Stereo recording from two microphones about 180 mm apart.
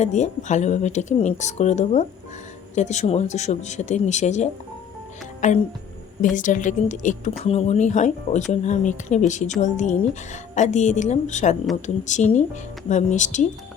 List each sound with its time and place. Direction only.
0.0 s speech: 40° left (ahead or behind)